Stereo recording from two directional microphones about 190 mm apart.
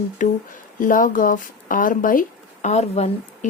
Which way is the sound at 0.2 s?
40° left (ahead or behind).